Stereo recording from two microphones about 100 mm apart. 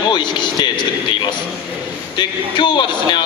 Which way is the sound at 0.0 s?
50° left (ahead or behind).